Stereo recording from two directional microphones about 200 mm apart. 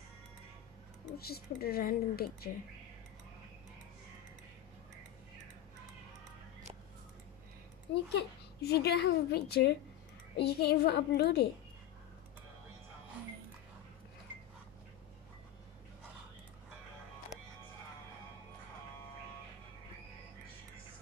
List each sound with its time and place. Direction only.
1.1 s speech: 50° left (ahead or behind)
8.2 s a woman's voice: 55° left (ahead or behind)